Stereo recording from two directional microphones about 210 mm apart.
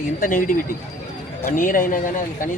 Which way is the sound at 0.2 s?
40° left (ahead or behind).